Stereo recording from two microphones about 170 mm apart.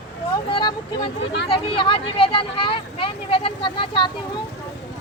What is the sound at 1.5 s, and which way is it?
Speech, 30° left (ahead or behind).